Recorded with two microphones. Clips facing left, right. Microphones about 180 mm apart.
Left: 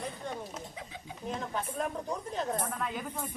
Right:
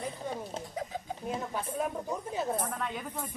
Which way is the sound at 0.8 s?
40° right (ahead or behind).